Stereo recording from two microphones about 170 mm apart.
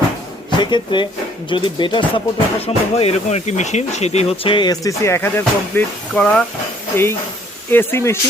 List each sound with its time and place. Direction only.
0.6 s speech: 25° left (ahead or behind)